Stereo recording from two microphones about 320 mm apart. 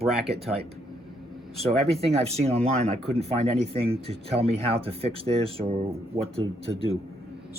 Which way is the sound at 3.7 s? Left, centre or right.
Centre.